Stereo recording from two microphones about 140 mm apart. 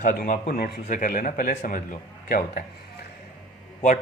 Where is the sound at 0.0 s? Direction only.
75° left (ahead or behind).